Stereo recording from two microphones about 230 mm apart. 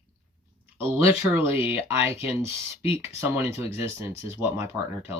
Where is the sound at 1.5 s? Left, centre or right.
Left.